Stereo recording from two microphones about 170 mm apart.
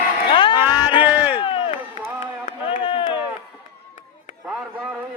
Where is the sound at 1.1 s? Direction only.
10° right (ahead or behind).